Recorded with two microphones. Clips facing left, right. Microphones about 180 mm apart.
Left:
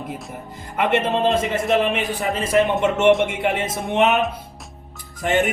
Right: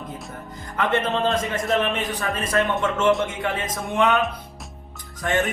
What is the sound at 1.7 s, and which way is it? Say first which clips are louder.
Speech: left 3 dB; 15° left (ahead or behind).